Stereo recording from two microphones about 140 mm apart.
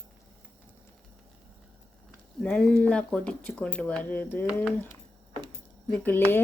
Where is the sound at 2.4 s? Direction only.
5° left (ahead or behind).